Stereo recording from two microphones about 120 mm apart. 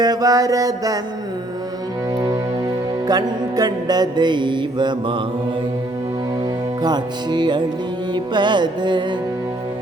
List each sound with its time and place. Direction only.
0.0 s mantra: 30° right (ahead or behind)
3.1 s music: 35° right (ahead or behind)
6.8 s music: 35° right (ahead or behind)